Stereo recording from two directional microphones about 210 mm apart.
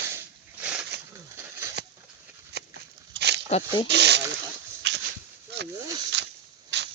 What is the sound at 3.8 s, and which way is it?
Speech, 55° right (ahead or behind).